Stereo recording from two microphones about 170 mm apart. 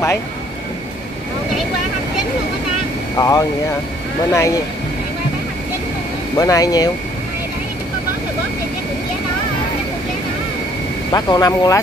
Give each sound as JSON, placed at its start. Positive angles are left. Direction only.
{"t": 3.2, "sound": "speech", "side_deg": 20}
{"t": 6.3, "sound": "speech", "side_deg": 20}
{"t": 11.1, "sound": "speech", "side_deg": 25}